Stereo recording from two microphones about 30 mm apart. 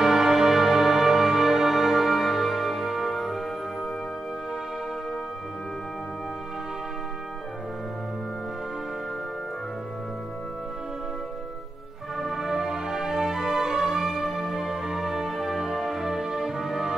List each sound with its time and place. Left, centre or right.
0.0 s music: centre
12.2 s music: centre
14.0 s music: centre